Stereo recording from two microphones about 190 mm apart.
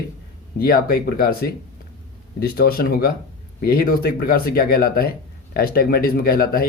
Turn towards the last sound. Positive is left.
turn(degrees=50)  # may be behind; listen again after turning